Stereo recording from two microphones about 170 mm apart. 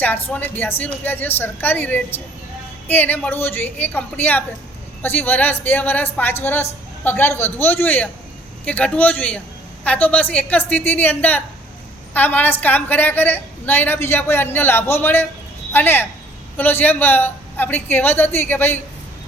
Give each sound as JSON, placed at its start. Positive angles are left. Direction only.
{"t": 0.0, "sound": "a woman's voice", "side_deg": 10}